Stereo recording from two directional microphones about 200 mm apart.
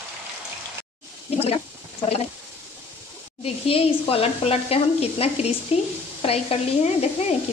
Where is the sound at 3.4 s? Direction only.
30° left (ahead or behind).